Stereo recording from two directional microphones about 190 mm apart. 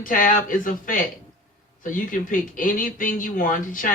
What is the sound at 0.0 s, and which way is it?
Speech, 45° left (ahead or behind).